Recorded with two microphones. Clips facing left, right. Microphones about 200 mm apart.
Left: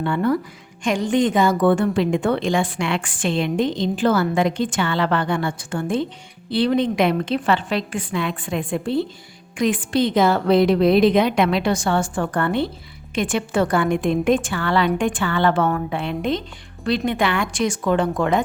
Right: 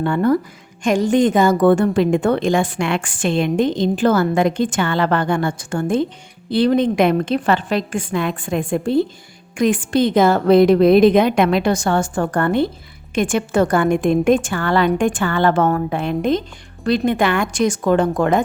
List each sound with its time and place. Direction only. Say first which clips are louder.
0.0 s a woman's voice: right 4 dB; 45° right (ahead or behind)